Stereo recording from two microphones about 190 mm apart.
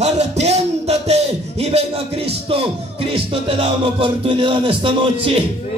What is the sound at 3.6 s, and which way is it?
Speech, 30° right (ahead or behind).